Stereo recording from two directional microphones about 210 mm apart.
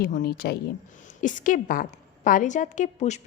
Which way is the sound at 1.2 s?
40° left (ahead or behind).